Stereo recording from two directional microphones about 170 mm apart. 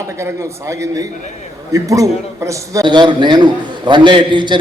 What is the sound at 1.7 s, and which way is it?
A man's voice, 20° right (ahead or behind).